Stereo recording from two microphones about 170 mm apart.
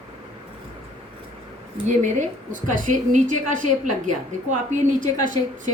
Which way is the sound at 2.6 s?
50° right (ahead or behind).